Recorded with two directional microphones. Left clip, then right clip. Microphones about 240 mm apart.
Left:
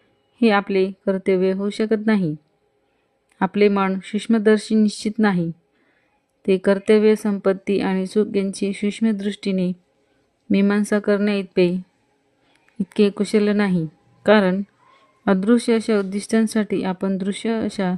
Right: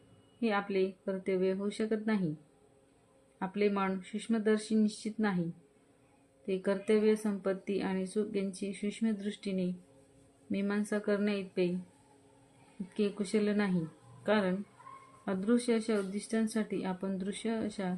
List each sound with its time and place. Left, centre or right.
0.3 s speech: left
3.3 s speech: left
12.9 s speech: left